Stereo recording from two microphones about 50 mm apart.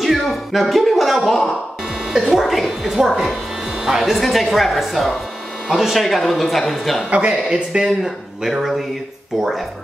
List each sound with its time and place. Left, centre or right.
0.0 s speech: centre
7.1 s a man's voice: right
7.8 s speech: centre